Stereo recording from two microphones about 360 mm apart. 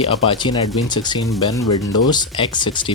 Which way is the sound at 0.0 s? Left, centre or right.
Centre.